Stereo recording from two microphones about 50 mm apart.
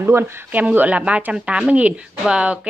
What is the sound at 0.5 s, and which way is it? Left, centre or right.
A woman's voice, right.